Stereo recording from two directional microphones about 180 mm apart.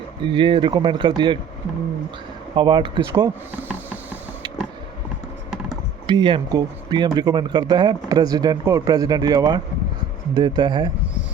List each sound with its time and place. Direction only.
0.3 s speech: 25° right (ahead or behind)
2.6 s speech: 25° right (ahead or behind)
3.7 s a sound: 10° right (ahead or behind)
6.1 s speech: 25° right (ahead or behind)